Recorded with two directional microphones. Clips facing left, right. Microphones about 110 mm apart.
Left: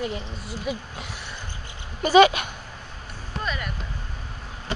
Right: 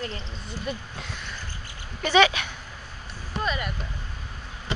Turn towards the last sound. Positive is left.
turn(degrees=0)  # may be behind; listen again after turning